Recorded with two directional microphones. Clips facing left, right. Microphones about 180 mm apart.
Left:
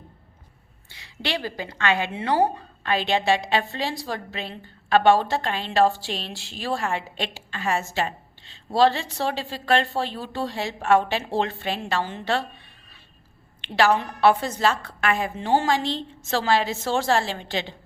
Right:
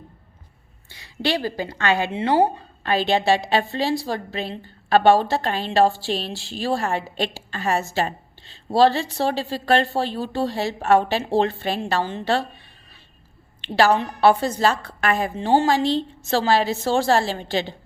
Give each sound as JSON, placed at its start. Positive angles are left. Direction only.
{"t": 0.9, "sound": "a woman's voice", "side_deg": -40}
{"t": 13.6, "sound": "a woman's voice", "side_deg": -35}